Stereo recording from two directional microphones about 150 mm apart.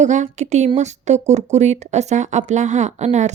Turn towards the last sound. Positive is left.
turn(degrees=-50)  # may be behind; listen again after turning